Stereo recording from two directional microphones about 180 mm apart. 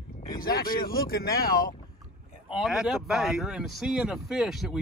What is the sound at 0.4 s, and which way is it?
Speech, 55° left (ahead or behind).